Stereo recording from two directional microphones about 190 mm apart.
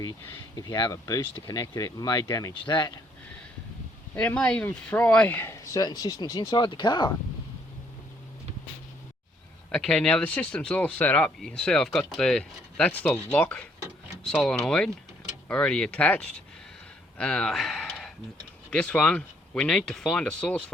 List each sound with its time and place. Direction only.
0.5 s speech: 20° left (ahead or behind)
4.1 s speech: 5° left (ahead or behind); by 7.1 s 25° left (ahead or behind)
9.7 s speech: 5° left (ahead or behind)